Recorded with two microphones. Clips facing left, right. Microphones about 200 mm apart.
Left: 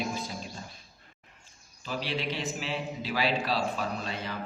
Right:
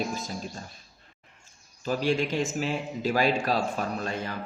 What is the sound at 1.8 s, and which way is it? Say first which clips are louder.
A man's voice: right 7 dB; 45° right (ahead or behind).